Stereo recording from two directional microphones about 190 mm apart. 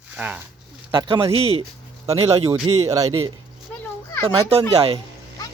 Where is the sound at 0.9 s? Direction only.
25° right (ahead or behind).